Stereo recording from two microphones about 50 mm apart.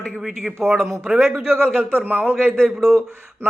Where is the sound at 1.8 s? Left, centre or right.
Right.